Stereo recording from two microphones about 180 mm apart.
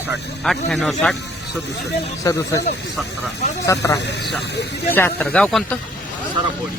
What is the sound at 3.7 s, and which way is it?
Speech, 15° left (ahead or behind).